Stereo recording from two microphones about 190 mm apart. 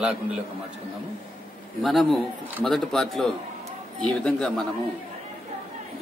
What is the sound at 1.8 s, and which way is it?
A man's voice, centre (ahead or behind).